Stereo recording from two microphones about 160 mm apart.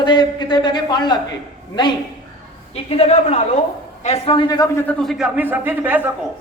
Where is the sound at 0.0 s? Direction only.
30° left (ahead or behind).